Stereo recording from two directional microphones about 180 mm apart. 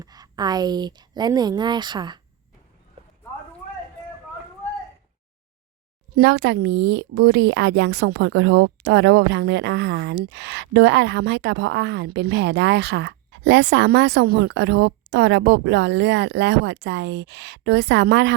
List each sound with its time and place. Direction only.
0.0 s a woman's voice: 20° right (ahead or behind)
3.0 s clip-clop: 35° right (ahead or behind)
6.1 s a woman's voice: 75° right (ahead or behind)